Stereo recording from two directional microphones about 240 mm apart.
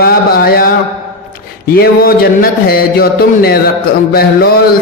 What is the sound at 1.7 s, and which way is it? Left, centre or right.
Speech, left.